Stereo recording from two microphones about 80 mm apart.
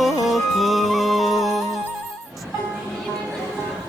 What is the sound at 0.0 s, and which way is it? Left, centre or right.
Music, centre.